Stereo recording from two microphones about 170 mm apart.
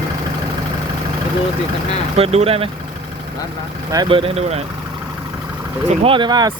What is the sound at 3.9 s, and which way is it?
Speech, 25° right (ahead or behind).